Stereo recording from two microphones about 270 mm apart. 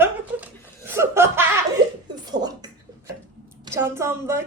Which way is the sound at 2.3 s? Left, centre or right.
Centre.